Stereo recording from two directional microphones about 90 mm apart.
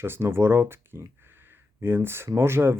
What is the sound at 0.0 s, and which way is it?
Speech, 25° right (ahead or behind).